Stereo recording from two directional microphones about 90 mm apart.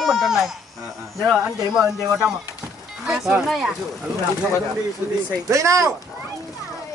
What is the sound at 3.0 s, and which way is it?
Speech, 10° right (ahead or behind).